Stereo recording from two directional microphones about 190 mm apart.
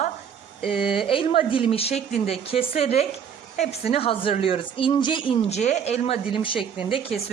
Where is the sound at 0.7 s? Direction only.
30° left (ahead or behind).